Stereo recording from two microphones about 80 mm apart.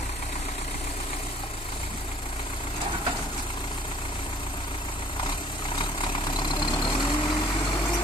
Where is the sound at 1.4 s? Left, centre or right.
Left.